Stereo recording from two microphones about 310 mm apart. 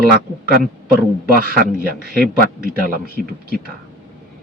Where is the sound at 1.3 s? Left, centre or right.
Right.